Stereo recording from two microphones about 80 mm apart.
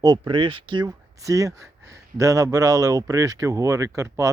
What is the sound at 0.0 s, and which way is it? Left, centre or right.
Speech, right.